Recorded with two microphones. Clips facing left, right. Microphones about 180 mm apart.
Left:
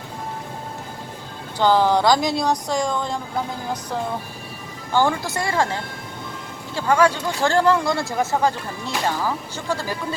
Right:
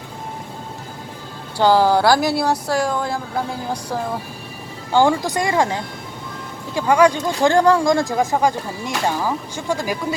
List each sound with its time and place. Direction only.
1.5 s speech: 10° right (ahead or behind)
4.9 s speech: 15° right (ahead or behind)